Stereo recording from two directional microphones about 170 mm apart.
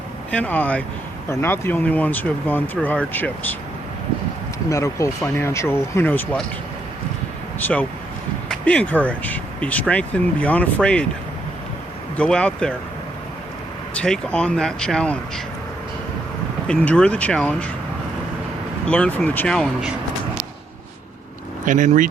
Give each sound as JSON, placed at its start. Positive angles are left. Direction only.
{"t": 0.3, "sound": "speech", "side_deg": 10}
{"t": 4.7, "sound": "speech", "side_deg": 20}
{"t": 7.6, "sound": "speech", "side_deg": 10}
{"t": 12.1, "sound": "speech", "side_deg": 5}
{"t": 14.0, "sound": "speech", "side_deg": 5}
{"t": 16.6, "sound": "speech", "side_deg": 5}
{"t": 18.9, "sound": "speech", "side_deg": 5}
{"t": 21.6, "sound": "speech", "side_deg": -50}